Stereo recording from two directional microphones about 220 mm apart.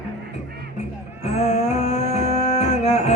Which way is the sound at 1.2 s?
30° left (ahead or behind).